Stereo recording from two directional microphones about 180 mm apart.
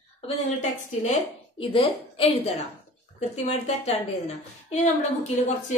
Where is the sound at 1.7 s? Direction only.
30° left (ahead or behind).